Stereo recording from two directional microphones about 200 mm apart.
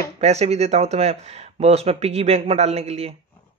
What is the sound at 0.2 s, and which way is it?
Speech, 35° right (ahead or behind).